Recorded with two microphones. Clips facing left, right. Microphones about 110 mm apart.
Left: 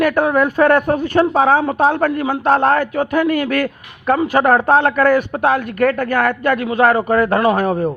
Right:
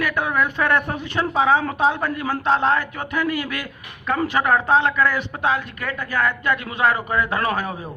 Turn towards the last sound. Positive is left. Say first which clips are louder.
# left 9 dB
turn(degrees=50)  # may be behind; listen again after turning